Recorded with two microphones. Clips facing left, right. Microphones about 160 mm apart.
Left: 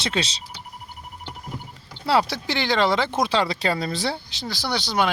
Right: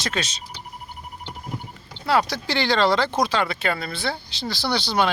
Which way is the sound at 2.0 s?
30° left (ahead or behind).